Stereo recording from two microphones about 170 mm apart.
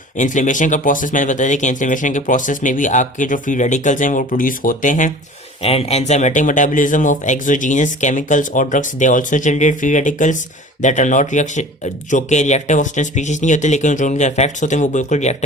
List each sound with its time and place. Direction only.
0.2 s speech: 50° left (ahead or behind)
5.6 s speech: 35° left (ahead or behind)